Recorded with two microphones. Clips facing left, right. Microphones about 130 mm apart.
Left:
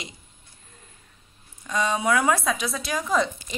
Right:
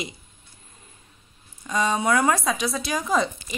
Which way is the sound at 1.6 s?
Centre (ahead or behind).